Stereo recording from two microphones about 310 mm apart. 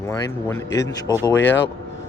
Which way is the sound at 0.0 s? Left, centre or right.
Centre.